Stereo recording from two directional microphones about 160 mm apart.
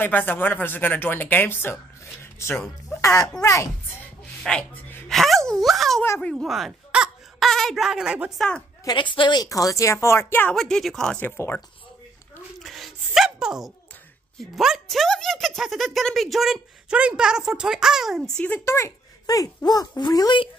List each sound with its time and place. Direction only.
0.0 s a woman's voice: 10° left (ahead or behind)
4.4 s speech: 5° left (ahead or behind)
6.0 s speech: 15° left (ahead or behind)
6.3 s speech: centre (ahead or behind)
8.8 s a woman's voice: 30° left (ahead or behind); by 10.6 s 10° left (ahead or behind)
10.6 s speech: centre (ahead or behind)
12.5 s a sound: centre (ahead or behind)
14.4 s speech: centre (ahead or behind)
18.8 s a child's voice: 20° left (ahead or behind)